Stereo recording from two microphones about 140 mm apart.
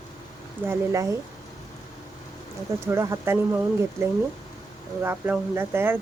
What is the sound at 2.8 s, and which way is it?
Speech, 20° right (ahead or behind).